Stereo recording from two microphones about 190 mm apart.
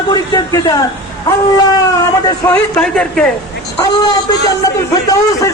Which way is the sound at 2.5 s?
5° left (ahead or behind).